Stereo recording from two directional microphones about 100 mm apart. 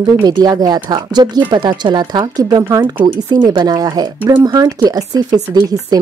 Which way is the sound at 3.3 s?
45° right (ahead or behind).